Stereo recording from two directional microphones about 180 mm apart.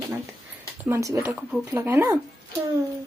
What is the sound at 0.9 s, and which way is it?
Speech, 15° right (ahead or behind).